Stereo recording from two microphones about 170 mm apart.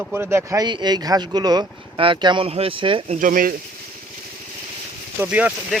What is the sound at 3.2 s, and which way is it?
Speech, 55° right (ahead or behind).